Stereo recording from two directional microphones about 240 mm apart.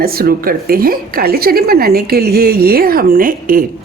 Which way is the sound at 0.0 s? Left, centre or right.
Right.